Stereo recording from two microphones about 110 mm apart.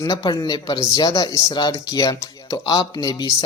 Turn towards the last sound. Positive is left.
turn(degrees=40)  # may be behind; listen again after turning